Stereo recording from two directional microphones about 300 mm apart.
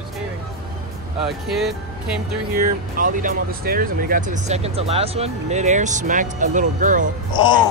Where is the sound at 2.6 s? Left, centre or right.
Right.